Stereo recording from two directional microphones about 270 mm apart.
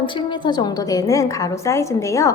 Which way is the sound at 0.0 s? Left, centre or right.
Centre.